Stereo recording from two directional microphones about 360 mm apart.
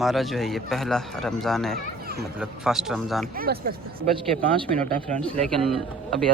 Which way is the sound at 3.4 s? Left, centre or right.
Right.